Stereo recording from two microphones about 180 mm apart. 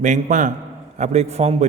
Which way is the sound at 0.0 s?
45° right (ahead or behind).